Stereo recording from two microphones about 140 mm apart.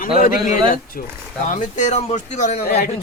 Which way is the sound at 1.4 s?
60° left (ahead or behind).